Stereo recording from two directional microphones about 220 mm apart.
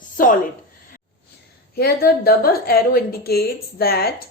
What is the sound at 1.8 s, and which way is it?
A woman's voice, 45° left (ahead or behind).